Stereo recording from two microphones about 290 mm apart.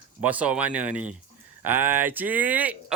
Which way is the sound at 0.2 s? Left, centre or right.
Centre.